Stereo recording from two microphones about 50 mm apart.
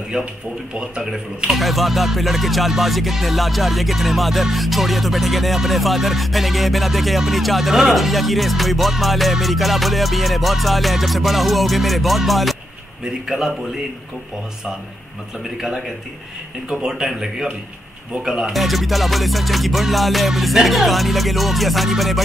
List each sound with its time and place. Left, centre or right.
0.1 s speech: centre
1.5 s music: centre
15.5 s speech: centre
18.5 s music: centre